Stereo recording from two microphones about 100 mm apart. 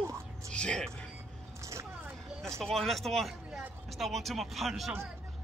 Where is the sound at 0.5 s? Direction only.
10° left (ahead or behind).